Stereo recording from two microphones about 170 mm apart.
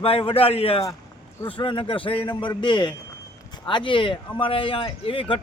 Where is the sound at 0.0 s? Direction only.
35° left (ahead or behind).